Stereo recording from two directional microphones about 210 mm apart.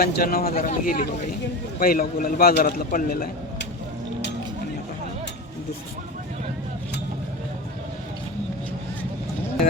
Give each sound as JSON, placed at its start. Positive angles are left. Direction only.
{"t": 0.0, "sound": "a man's voice", "side_deg": 45}